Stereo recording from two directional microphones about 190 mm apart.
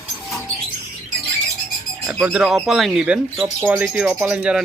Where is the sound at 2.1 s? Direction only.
5° right (ahead or behind).